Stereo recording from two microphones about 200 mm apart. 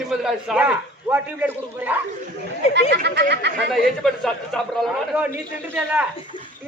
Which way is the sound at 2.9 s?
60° right (ahead or behind).